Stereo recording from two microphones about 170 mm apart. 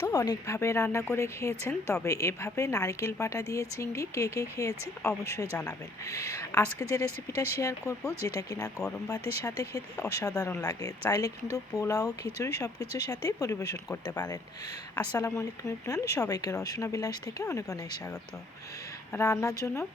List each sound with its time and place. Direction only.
0.0 s speech: 20° left (ahead or behind)
19.1 s speech: 15° left (ahead or behind)